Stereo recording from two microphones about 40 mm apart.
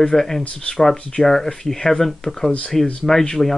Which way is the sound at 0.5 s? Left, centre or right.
Left.